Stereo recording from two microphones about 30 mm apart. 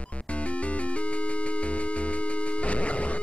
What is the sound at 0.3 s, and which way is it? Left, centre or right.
Music, left.